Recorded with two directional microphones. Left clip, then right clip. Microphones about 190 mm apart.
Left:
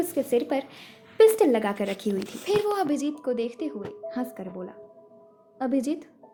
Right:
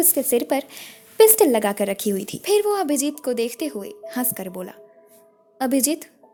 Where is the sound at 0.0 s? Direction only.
45° right (ahead or behind).